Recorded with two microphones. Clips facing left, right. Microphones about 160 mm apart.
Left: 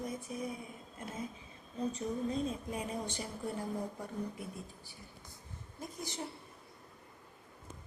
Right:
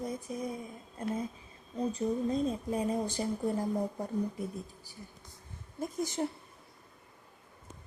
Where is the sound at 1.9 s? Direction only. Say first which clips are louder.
Right 7 dB; 40° right (ahead or behind).